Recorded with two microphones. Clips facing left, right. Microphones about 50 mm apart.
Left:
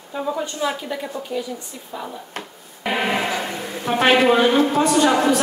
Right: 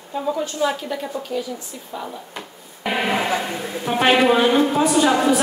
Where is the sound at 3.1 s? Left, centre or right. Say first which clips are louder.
Right 1 dB; right.